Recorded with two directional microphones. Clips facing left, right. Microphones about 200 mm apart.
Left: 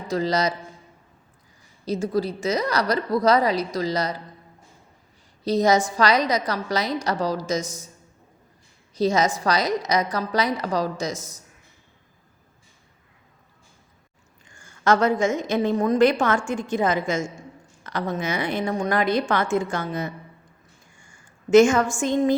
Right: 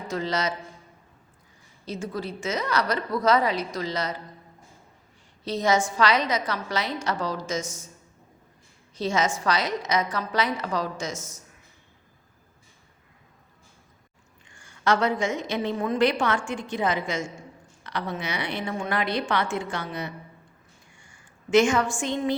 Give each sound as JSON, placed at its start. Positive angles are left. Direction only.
{"t": 0.1, "sound": "a woman's voice", "side_deg": 35}
{"t": 1.8, "sound": "a woman's voice", "side_deg": 35}
{"t": 5.5, "sound": "a woman's voice", "side_deg": 40}
{"t": 9.0, "sound": "a woman's voice", "side_deg": 40}
{"t": 14.4, "sound": "a woman's voice", "side_deg": 45}